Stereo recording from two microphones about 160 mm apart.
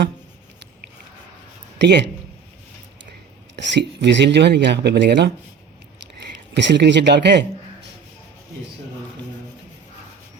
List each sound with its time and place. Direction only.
1.8 s speech: 90° right
3.8 s speech: 90° right
6.5 s speech: 90° right